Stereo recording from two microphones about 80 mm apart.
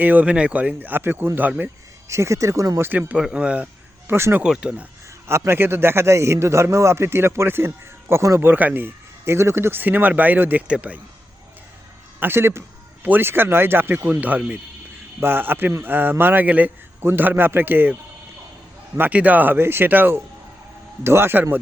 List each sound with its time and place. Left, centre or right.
0.0 s speech: centre
2.0 s a man's voice: right
3.3 s speech: centre
4.0 s speech: right
4.4 s speech: centre
5.3 s a man's voice: right
8.4 s speech: right
12.2 s speech: right
18.9 s a man's voice: right